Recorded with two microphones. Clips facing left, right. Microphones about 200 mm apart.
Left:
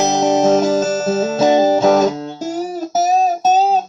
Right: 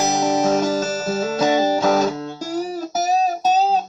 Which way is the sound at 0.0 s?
25° left (ahead or behind).